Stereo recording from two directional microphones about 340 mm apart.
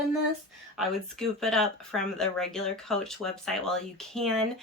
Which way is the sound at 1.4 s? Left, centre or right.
Centre.